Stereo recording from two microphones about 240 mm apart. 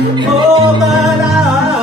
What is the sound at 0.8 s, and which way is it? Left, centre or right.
Music, centre.